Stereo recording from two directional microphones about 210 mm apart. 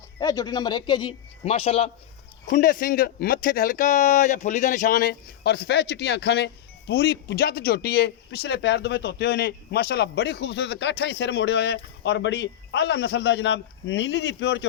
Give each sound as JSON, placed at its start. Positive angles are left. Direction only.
{"t": 0.2, "sound": "a man's voice", "side_deg": 15}
{"t": 2.5, "sound": "speech", "side_deg": 40}